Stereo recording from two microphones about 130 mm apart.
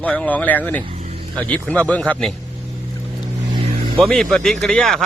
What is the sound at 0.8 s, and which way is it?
Vehicle, 55° right (ahead or behind).